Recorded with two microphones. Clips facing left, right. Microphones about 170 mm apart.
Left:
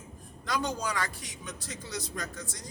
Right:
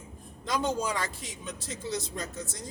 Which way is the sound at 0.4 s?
25° right (ahead or behind).